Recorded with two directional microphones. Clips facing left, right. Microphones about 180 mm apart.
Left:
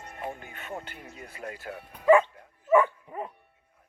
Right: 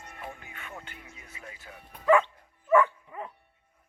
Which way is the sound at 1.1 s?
60° left (ahead or behind).